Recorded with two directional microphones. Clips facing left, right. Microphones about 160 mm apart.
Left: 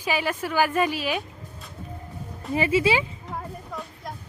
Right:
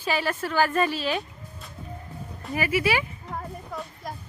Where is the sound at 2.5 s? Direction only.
25° left (ahead or behind).